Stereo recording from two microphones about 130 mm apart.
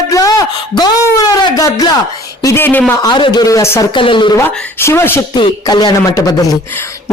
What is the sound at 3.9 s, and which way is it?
Speech, 40° left (ahead or behind).